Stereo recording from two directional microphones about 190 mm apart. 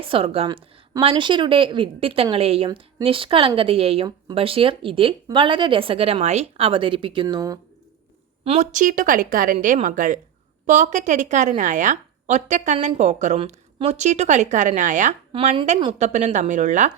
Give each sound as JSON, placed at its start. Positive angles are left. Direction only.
{"t": 0.0, "sound": "a woman's voice", "side_deg": -30}
{"t": 8.4, "sound": "speech", "side_deg": -40}
{"t": 15.3, "sound": "a woman's voice", "side_deg": -25}